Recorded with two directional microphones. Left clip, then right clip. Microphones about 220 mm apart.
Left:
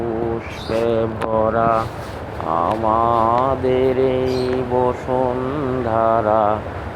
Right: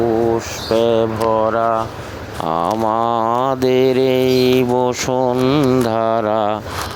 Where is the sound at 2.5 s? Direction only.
55° right (ahead or behind).